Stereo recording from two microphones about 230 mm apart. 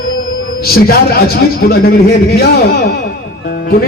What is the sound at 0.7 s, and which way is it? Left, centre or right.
A man's voice, left.